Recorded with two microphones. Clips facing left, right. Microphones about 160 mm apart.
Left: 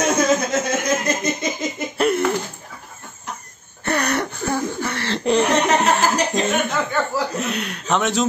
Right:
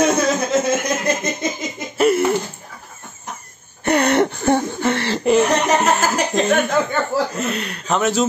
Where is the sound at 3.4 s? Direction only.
15° right (ahead or behind).